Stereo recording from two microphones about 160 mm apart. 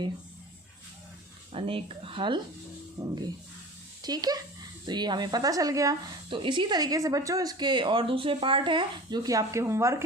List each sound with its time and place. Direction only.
1.5 s a woman's voice: 35° right (ahead or behind); by 10.0 s 20° right (ahead or behind)